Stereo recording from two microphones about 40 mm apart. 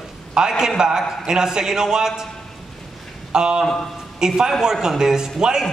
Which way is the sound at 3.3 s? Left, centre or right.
Right.